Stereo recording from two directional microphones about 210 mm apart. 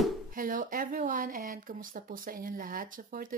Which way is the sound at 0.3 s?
40° right (ahead or behind).